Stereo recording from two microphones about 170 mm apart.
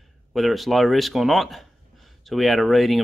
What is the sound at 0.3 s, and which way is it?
Speech, centre (ahead or behind).